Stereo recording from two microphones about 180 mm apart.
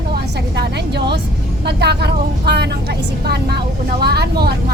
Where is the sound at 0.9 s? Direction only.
70° right (ahead or behind).